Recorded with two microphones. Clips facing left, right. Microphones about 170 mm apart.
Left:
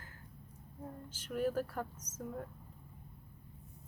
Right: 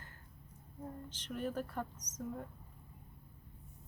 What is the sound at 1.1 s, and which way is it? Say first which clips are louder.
Speech: left 5 dB; 5° left (ahead or behind).